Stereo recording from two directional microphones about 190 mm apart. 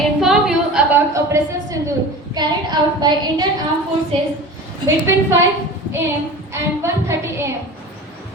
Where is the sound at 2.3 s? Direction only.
20° right (ahead or behind).